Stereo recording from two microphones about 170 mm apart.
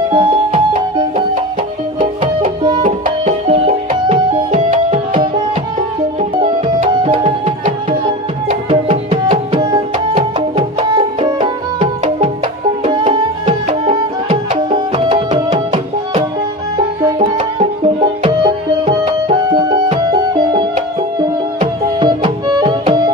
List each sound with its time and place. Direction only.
0.1 s music: 30° right (ahead or behind)
2.4 s music: 30° right (ahead or behind)
6.9 s music: 30° right (ahead or behind)
9.3 s music: 25° right (ahead or behind)
22.0 s music: 25° right (ahead or behind)